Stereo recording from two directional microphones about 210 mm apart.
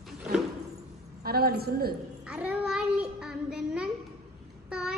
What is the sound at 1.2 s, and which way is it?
Speech, 45° right (ahead or behind).